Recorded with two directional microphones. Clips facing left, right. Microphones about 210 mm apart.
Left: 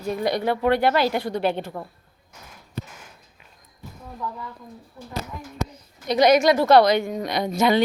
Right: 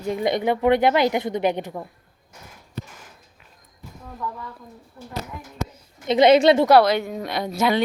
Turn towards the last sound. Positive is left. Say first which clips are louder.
# left 2 dB
turn(degrees=-5)  # may be behind; listen again after turning